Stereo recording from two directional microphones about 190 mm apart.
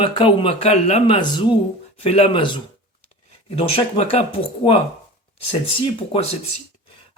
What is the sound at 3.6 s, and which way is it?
Speech, 30° left (ahead or behind).